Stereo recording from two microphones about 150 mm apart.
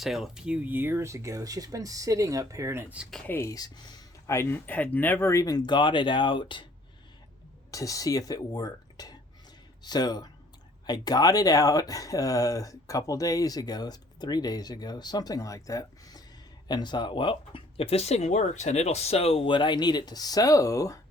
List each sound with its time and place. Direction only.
0.0 s speech: centre (ahead or behind); by 3.0 s 20° right (ahead or behind)
3.2 s speech: 20° left (ahead or behind)
7.7 s speech: 20° left (ahead or behind)